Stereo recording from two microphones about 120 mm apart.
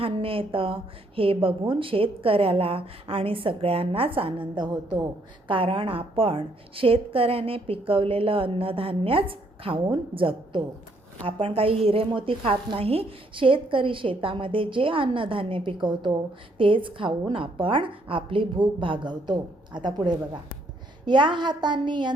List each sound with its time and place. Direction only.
0.0 s a woman's voice: 50° right (ahead or behind)
5.5 s a woman's voice: 45° right (ahead or behind)